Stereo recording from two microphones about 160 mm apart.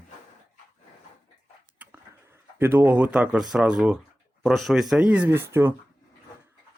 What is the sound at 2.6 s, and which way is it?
Speech, 10° right (ahead or behind).